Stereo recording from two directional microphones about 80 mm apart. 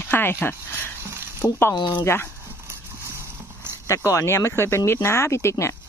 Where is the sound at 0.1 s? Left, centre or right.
Left.